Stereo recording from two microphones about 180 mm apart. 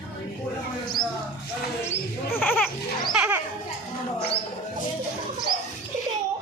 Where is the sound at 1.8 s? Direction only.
10° left (ahead or behind).